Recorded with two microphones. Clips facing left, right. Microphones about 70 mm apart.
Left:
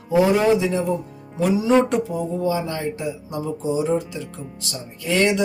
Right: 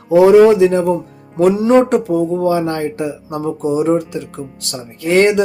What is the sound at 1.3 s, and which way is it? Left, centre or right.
Speech, right.